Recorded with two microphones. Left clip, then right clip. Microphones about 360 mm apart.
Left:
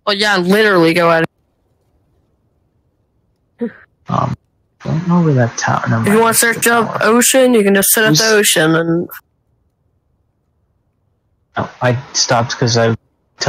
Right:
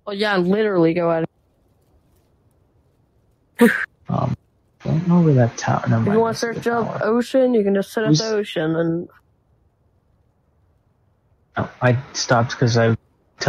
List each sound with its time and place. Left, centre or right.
0.2 s speech: centre
3.5 s a sound: right
4.0 s speech: centre
6.1 s speech: left
11.5 s a man's voice: centre